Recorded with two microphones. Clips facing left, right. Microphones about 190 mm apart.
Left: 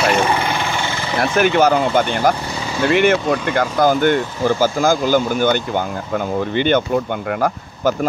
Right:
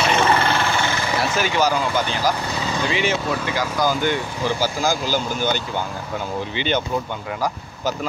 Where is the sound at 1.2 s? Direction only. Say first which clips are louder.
Left 7 dB; 55° left (ahead or behind).